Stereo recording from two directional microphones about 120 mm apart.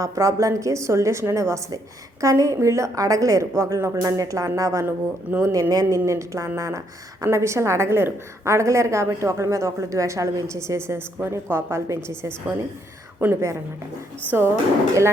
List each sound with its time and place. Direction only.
0.0 s a woman's voice: 25° right (ahead or behind)
13.1 s a woman's voice: 20° right (ahead or behind)